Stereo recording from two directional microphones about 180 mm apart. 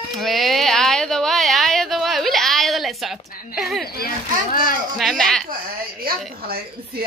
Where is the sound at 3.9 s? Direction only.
55° left (ahead or behind).